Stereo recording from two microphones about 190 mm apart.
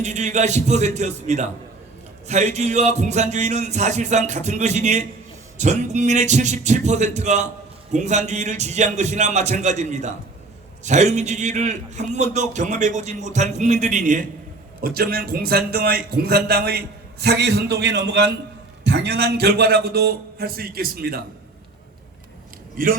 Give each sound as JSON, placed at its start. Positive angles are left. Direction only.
{"t": 0.0, "sound": "a man's voice", "side_deg": -40}
{"t": 14.8, "sound": "a man's voice", "side_deg": -55}
{"t": 22.8, "sound": "a man's voice", "side_deg": -45}